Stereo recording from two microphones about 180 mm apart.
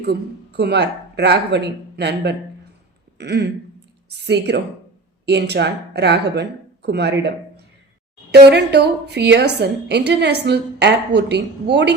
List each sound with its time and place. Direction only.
0.0 s a woman's voice: 65° right (ahead or behind)